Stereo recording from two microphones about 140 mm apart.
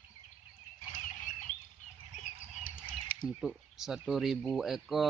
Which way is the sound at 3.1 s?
90° left.